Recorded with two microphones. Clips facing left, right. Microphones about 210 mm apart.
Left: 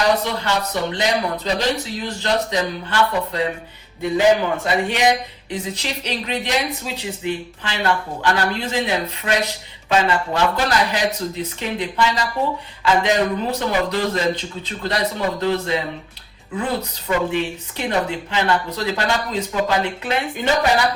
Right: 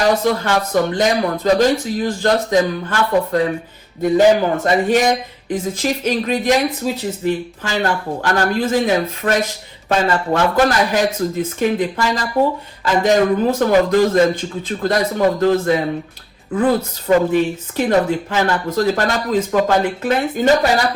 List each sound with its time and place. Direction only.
0.0 s speech: 50° right (ahead or behind)
17.1 s speech: 45° right (ahead or behind)